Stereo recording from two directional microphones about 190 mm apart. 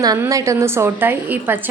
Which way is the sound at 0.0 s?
20° right (ahead or behind).